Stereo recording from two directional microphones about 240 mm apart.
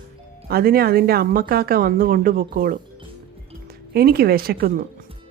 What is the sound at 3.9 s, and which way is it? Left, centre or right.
Speech, right.